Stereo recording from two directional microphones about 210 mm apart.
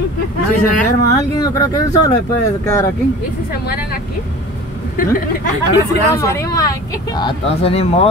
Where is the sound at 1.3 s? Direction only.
15° left (ahead or behind).